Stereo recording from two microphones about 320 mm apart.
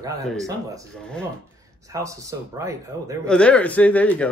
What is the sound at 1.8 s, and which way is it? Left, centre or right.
Speech, centre.